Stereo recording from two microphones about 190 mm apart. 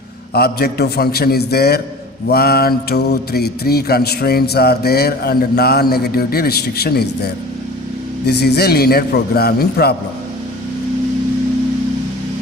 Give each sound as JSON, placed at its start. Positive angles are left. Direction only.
{"t": 0.3, "sound": "mantra", "side_deg": 55}
{"t": 8.3, "sound": "mantra", "side_deg": 60}